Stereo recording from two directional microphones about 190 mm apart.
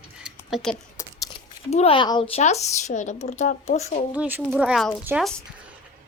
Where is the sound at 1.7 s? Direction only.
30° left (ahead or behind).